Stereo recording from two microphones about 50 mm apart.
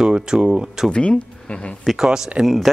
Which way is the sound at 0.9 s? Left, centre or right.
Left.